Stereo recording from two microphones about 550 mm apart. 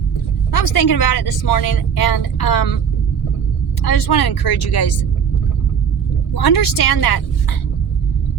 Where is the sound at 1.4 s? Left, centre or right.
Left.